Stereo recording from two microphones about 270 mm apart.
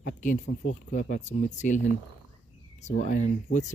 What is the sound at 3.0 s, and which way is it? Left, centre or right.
Speech, left.